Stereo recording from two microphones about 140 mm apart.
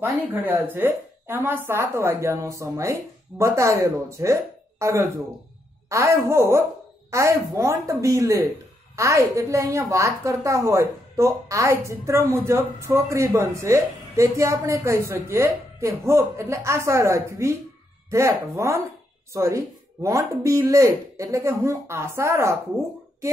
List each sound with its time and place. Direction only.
0.0 s a woman's voice: 15° right (ahead or behind)